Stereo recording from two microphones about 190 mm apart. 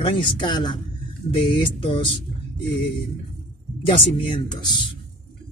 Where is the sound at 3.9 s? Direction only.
30° left (ahead or behind).